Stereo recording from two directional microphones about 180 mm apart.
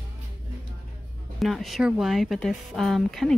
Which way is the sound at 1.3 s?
Centre (ahead or behind).